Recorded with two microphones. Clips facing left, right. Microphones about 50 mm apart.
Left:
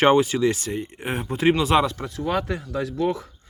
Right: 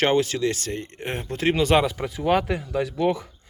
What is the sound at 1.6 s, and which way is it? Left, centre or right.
Speech, centre.